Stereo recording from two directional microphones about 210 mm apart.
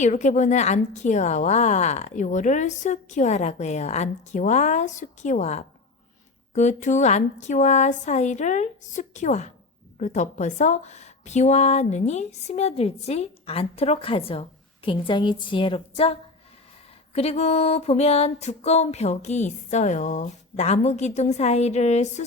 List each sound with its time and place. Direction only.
0.0 s a woman's voice: 35° left (ahead or behind)
17.2 s a woman's voice: 30° left (ahead or behind)